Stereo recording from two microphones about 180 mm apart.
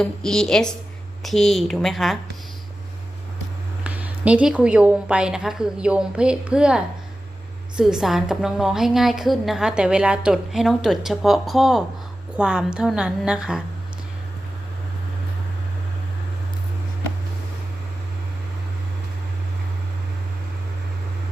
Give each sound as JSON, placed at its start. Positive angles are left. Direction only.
{"t": 0.0, "sound": "a woman's voice", "side_deg": 5}
{"t": 3.8, "sound": "a woman's voice", "side_deg": -10}